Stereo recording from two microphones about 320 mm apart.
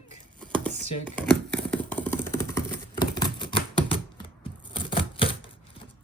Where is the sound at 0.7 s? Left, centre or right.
Left.